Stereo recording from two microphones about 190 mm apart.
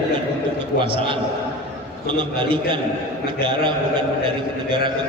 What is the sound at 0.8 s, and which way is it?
Speech, 25° right (ahead or behind).